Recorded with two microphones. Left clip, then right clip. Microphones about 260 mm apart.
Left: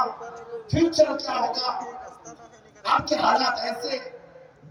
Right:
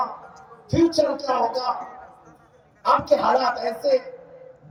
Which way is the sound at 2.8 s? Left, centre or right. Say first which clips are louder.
Right 3 dB; right.